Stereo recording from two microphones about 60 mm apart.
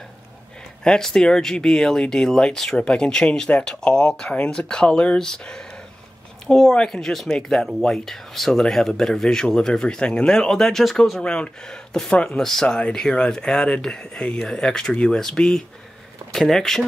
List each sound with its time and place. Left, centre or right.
0.8 s speech: centre